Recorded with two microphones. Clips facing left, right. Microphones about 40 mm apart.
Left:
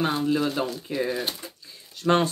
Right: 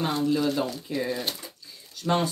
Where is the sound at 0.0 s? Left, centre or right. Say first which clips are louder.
Left 1 dB; centre.